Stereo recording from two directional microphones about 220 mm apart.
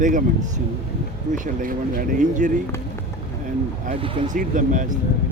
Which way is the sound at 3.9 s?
30° right (ahead or behind).